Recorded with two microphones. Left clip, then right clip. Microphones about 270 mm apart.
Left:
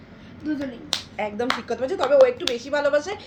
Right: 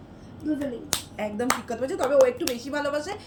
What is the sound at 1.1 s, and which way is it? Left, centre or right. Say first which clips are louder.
Speech: left 1 dB; centre.